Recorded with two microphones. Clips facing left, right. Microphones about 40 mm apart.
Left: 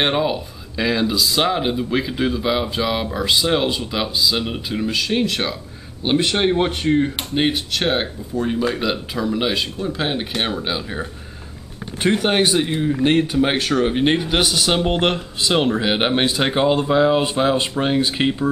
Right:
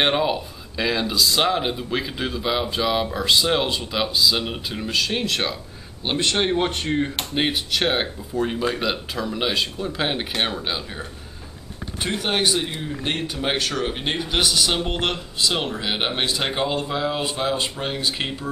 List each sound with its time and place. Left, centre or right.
0.0 s speech: centre
6.0 s speech: centre
12.0 s speech: left